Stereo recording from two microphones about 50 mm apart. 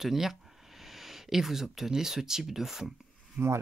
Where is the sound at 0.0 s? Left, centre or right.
Centre.